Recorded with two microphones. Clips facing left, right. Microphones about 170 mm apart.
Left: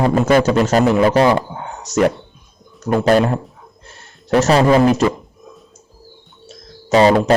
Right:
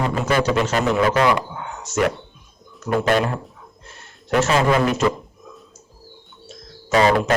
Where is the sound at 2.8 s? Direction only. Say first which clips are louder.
Left 5 dB; 35° left (ahead or behind).